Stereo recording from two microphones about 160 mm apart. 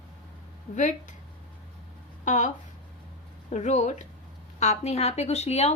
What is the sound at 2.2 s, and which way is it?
Speech, 50° left (ahead or behind).